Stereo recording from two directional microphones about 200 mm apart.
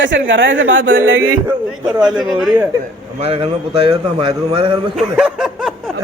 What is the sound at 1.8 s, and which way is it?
Speech, 5° right (ahead or behind).